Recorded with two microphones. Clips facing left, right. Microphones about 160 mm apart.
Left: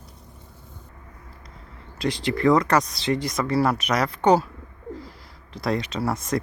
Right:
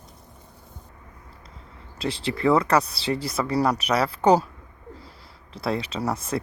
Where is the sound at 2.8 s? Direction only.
30° right (ahead or behind).